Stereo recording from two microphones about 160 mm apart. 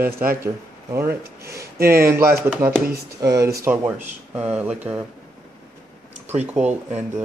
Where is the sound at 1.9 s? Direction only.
15° right (ahead or behind).